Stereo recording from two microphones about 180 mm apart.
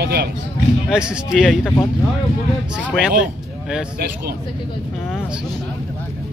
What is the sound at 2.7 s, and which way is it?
Speech, 5° right (ahead or behind).